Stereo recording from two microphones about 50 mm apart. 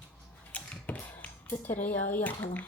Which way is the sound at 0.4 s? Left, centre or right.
Left.